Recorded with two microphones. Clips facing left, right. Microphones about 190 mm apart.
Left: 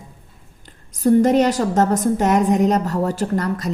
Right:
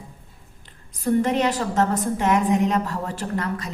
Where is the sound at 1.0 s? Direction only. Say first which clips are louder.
Left 6 dB; 40° left (ahead or behind).